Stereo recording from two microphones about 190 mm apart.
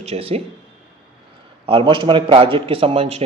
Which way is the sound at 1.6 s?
30° right (ahead or behind).